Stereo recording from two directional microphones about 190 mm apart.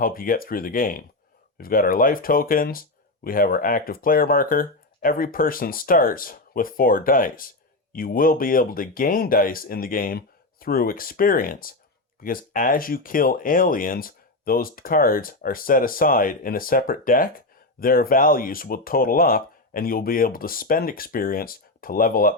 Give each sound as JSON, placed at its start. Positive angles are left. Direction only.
{"t": 0.0, "sound": "speech", "side_deg": 50}